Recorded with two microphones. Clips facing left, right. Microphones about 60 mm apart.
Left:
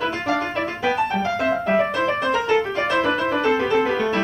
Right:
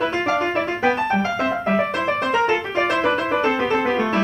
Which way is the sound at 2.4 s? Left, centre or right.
Right.